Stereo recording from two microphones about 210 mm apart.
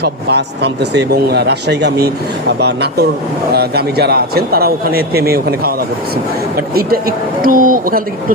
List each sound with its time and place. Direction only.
0.0 s a man's voice: 55° right (ahead or behind)